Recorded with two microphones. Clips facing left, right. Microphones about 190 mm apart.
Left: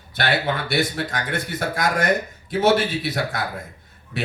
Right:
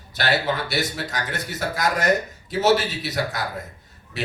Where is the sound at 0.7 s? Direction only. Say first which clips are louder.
Left 3 dB; 55° left (ahead or behind).